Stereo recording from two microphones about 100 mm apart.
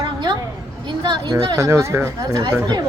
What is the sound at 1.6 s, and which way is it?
Speech, 30° right (ahead or behind).